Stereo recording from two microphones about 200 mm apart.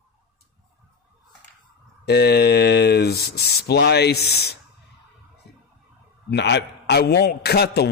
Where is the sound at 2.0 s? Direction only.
55° left (ahead or behind).